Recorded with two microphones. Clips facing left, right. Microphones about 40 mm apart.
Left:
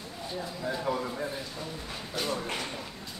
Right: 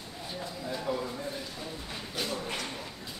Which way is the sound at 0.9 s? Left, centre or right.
Left.